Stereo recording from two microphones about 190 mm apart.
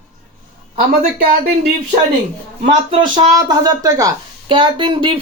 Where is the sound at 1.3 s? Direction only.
55° right (ahead or behind).